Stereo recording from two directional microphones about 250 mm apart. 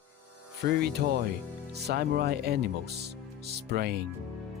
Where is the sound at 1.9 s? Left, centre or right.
Right.